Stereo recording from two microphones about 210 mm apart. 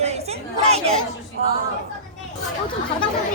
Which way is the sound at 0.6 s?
30° right (ahead or behind).